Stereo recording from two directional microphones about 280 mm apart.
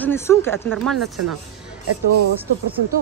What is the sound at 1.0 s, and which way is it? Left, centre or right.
Speech, right.